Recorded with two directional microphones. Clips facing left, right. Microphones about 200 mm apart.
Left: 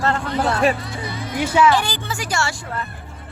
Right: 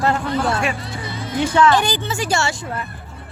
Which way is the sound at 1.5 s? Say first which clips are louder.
Even; 10° left (ahead or behind).